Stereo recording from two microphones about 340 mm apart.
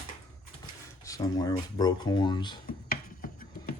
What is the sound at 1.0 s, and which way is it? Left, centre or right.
Speech, centre.